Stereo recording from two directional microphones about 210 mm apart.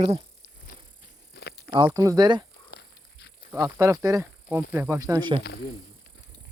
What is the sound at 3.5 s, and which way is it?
Speech, 15° right (ahead or behind).